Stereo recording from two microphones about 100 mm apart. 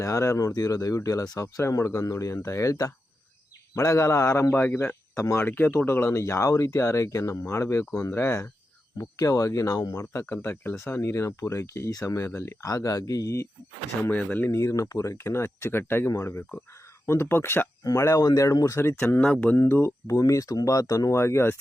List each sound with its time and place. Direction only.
0.0 s speech: 30° left (ahead or behind)
4.5 s speech: 20° left (ahead or behind)
19.2 s speech: 15° left (ahead or behind)
19.5 s speech: 25° left (ahead or behind)